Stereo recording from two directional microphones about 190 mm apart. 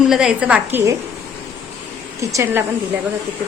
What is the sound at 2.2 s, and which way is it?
Speech, 15° right (ahead or behind).